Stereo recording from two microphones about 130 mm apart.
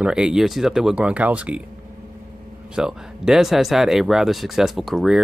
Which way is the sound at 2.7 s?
5° right (ahead or behind).